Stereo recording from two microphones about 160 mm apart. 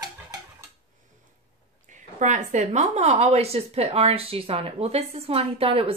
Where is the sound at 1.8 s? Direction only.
50° right (ahead or behind).